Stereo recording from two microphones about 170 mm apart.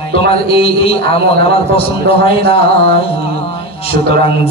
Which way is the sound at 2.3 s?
35° left (ahead or behind).